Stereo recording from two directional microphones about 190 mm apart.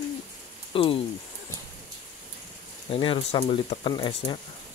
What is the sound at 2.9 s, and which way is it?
Speech, 30° left (ahead or behind).